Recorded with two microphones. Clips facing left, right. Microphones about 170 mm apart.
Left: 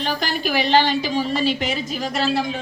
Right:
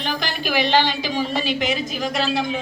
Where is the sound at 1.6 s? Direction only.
30° left (ahead or behind).